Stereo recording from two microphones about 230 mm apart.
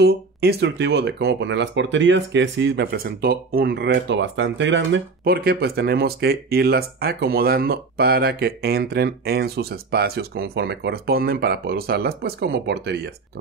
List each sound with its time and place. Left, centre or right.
0.0 s speech: right